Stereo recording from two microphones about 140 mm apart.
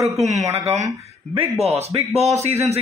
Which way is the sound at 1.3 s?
45° right (ahead or behind).